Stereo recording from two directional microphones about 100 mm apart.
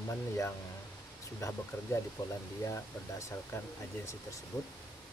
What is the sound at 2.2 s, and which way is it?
Speech, 45° left (ahead or behind).